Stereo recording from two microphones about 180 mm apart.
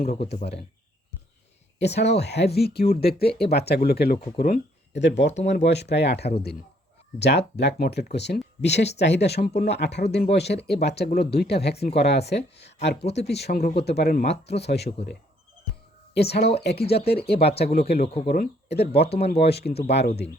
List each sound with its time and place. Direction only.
0.1 s speech: 35° left (ahead or behind)
1.8 s speech: 70° left (ahead or behind)
16.1 s speech: 65° left (ahead or behind)
19.0 s speech: 35° left (ahead or behind)
19.3 s speech: 65° left (ahead or behind)